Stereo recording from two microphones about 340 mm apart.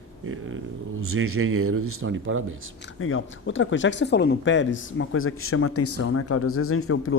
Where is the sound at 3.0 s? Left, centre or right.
Left.